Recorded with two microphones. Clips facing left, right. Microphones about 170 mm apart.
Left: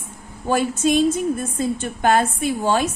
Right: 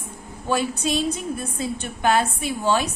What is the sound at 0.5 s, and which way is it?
A woman's voice, 50° left (ahead or behind).